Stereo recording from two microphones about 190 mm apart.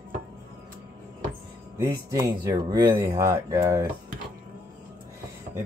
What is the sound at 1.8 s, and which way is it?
Speech, 15° right (ahead or behind).